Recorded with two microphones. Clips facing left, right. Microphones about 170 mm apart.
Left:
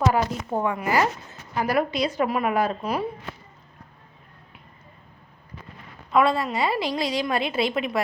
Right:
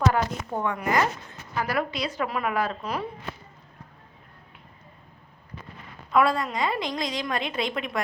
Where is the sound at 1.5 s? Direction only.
20° left (ahead or behind).